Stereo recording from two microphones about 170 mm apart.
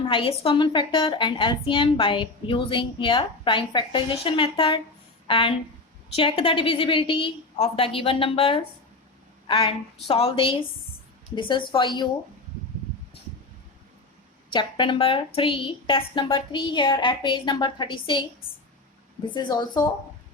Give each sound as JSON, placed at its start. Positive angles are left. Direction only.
{"t": 0.1, "sound": "a woman's voice", "side_deg": 30}
{"t": 14.5, "sound": "speech", "side_deg": 30}